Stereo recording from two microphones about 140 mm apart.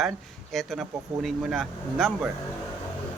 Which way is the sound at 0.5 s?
Centre (ahead or behind).